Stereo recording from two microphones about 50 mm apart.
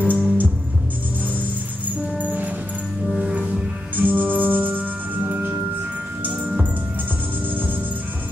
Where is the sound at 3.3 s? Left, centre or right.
Right.